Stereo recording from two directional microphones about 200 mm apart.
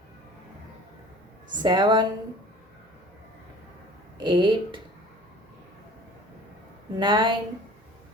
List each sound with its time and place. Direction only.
1.6 s speech: 20° right (ahead or behind)
4.2 s speech: 25° right (ahead or behind)
6.9 s speech: 20° right (ahead or behind)